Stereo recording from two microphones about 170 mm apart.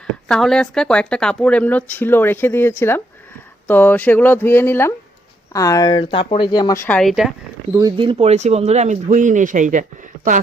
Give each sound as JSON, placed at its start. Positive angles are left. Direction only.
{"t": 0.3, "sound": "speech", "side_deg": 5}
{"t": 6.8, "sound": "speech", "side_deg": 5}
{"t": 7.7, "sound": "speech", "side_deg": -20}